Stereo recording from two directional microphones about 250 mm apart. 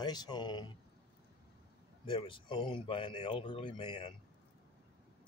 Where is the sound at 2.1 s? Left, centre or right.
Centre.